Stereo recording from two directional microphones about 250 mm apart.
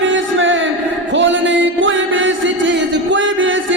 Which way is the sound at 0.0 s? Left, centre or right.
Right.